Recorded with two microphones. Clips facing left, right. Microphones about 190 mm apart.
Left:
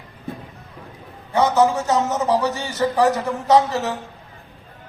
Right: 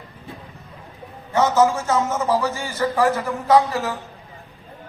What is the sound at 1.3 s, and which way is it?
A man's voice, 15° left (ahead or behind).